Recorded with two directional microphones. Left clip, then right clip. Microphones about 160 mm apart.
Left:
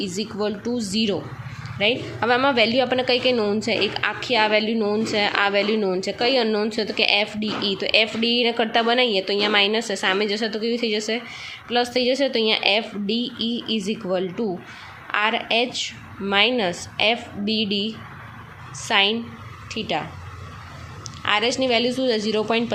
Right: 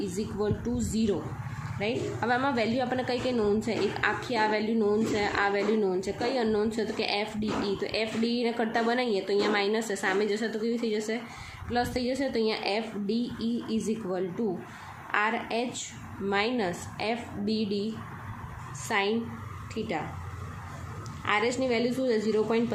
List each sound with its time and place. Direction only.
0.0 s a woman's voice: 20° left (ahead or behind)
21.2 s a woman's voice: 20° left (ahead or behind)